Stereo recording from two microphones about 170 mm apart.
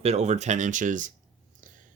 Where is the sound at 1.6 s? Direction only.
50° right (ahead or behind).